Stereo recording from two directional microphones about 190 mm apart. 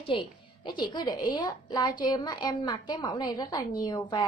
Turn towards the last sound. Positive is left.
turn(degrees=20)  # may be behind; listen again after turning